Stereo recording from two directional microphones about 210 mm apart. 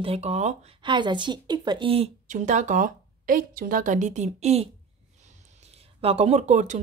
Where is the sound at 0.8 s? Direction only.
20° right (ahead or behind).